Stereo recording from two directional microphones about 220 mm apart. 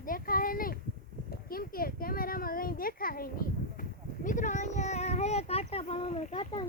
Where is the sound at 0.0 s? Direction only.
40° left (ahead or behind).